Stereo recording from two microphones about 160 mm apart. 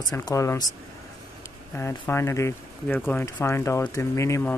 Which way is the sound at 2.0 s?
15° left (ahead or behind).